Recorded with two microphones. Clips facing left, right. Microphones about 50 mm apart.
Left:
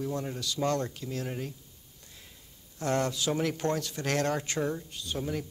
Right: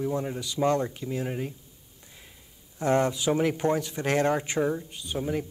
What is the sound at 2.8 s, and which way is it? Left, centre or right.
Speech, centre.